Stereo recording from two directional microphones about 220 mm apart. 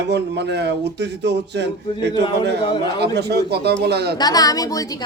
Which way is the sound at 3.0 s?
50° right (ahead or behind).